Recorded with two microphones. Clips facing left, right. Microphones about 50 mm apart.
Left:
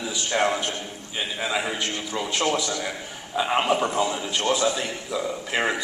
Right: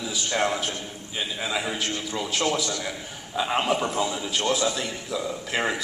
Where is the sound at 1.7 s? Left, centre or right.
Centre.